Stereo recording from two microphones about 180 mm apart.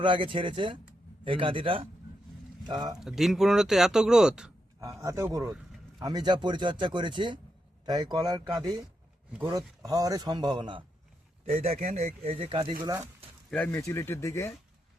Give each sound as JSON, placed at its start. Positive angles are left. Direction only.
{"t": 0.0, "sound": "speech", "side_deg": -30}
{"t": 3.0, "sound": "speech", "side_deg": 0}
{"t": 4.8, "sound": "a man's voice", "side_deg": -15}
{"t": 12.8, "sound": "speech", "side_deg": -20}
{"t": 13.5, "sound": "speech", "side_deg": 10}